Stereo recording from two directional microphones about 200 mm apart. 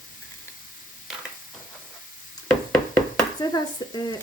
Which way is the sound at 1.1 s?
Centre (ahead or behind).